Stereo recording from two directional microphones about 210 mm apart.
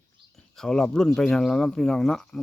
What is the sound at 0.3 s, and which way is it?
Speech, centre (ahead or behind).